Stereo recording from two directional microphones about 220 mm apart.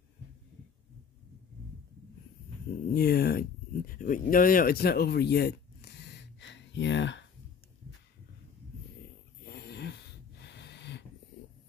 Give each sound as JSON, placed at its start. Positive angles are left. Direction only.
{"t": 2.9, "sound": "speech", "side_deg": 45}
{"t": 9.5, "sound": "wheeze", "side_deg": 50}